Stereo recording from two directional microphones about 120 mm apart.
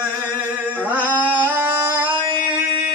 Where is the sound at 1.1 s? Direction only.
15° left (ahead or behind).